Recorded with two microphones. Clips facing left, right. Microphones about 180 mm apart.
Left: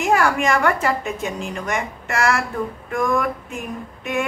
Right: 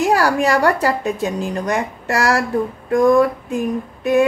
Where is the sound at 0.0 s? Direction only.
35° right (ahead or behind).